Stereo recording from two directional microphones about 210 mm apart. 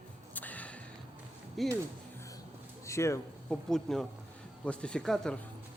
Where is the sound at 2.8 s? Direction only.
15° left (ahead or behind).